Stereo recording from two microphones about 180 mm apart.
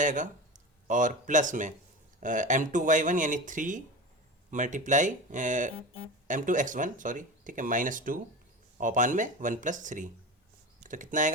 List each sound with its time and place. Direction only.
0.0 s speech: 45° right (ahead or behind)